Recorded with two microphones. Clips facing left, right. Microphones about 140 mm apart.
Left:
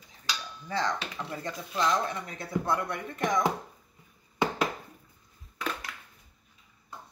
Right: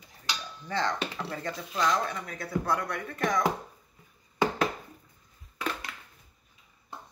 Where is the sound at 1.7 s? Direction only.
Centre (ahead or behind).